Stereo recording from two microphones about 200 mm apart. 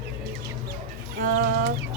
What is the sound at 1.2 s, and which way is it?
Chicken, 45° right (ahead or behind).